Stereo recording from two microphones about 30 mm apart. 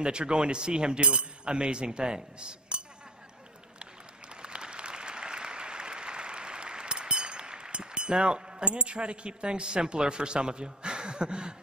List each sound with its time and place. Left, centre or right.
0.0 s speech: right
4.4 s applause: right
8.6 s speech: right